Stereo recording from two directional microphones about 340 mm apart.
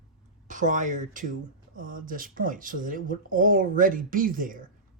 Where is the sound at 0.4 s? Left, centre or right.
Right.